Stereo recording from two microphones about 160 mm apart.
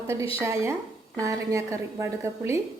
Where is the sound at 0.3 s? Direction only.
15° right (ahead or behind).